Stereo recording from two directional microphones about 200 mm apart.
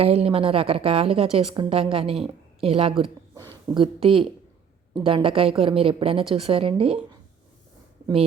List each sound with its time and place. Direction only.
0.0 s a woman's voice: 30° right (ahead or behind)